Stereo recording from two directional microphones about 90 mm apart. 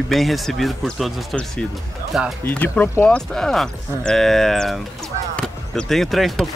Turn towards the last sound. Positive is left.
turn(degrees=0)  # may be behind; listen again after turning